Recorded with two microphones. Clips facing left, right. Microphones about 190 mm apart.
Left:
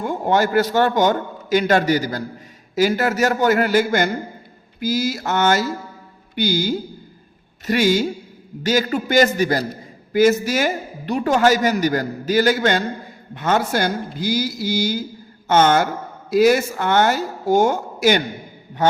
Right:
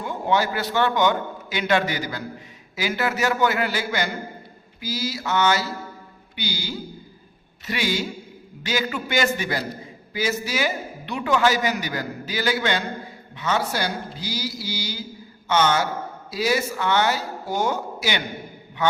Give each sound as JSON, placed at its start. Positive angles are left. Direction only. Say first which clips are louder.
{"t": 0.0, "sound": "a man's voice", "louder": "left 4 dB", "side_deg": 50}